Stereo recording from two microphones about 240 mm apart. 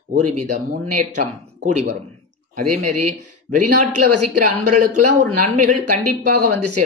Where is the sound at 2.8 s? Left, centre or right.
Right.